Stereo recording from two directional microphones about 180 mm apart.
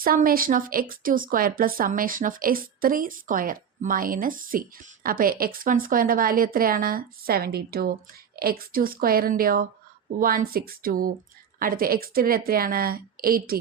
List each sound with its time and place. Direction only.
0.0 s a woman's voice: 55° right (ahead or behind)